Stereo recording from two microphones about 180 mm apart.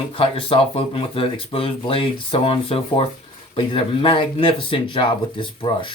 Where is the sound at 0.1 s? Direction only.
30° left (ahead or behind).